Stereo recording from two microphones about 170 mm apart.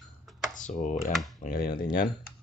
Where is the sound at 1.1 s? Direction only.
Centre (ahead or behind).